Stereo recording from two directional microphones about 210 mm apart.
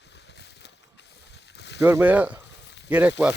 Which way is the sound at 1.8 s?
10° right (ahead or behind).